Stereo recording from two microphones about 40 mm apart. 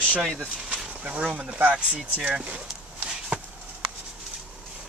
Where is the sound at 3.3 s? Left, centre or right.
Right.